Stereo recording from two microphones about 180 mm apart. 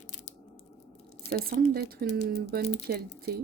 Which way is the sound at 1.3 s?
55° right (ahead or behind).